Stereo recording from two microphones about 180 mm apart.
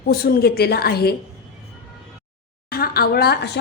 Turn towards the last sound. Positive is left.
turn(degrees=65)  # may be behind; listen again after turning